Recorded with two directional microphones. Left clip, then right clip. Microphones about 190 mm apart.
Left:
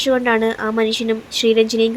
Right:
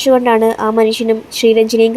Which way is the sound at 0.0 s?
15° right (ahead or behind).